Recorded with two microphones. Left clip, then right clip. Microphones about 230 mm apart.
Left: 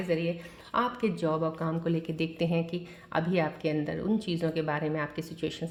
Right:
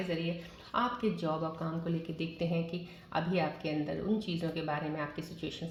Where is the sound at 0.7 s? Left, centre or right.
Left.